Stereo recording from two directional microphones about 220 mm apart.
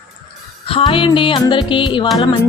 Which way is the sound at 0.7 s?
25° left (ahead or behind).